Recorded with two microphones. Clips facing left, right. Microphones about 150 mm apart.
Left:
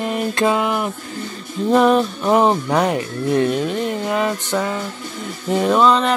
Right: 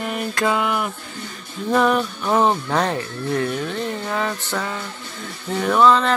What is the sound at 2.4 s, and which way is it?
Music, 15° left (ahead or behind).